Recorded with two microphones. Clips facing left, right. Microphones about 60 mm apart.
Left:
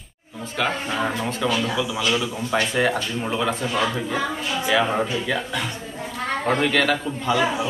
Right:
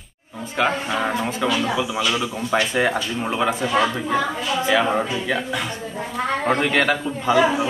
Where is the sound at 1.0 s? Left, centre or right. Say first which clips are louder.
Even; centre.